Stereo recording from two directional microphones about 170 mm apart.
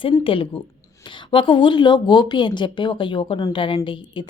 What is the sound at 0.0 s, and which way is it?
Speech, 30° left (ahead or behind).